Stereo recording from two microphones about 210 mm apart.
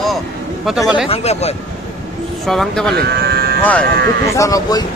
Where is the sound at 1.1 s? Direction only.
30° left (ahead or behind).